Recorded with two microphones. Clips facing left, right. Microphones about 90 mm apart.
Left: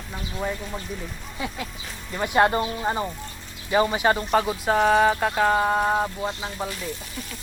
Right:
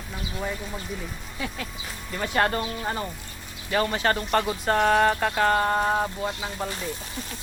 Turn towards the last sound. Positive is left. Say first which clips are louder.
# left 1 dB
turn(degrees=5)  # may be behind; listen again after turning